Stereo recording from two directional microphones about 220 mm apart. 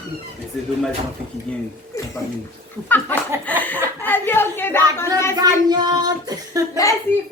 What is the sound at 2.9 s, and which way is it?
Speech, 10° left (ahead or behind).